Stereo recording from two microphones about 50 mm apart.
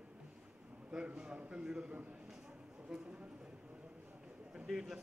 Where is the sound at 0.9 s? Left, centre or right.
Centre.